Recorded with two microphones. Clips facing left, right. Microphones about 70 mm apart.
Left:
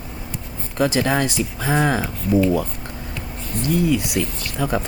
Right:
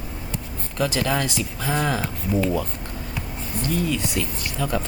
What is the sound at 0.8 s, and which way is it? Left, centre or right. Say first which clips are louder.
Speech: left 4 dB; left.